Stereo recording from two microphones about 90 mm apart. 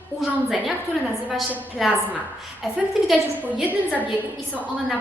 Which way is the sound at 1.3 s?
Centre (ahead or behind).